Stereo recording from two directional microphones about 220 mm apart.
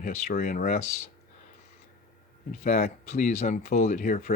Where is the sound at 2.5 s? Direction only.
35° left (ahead or behind).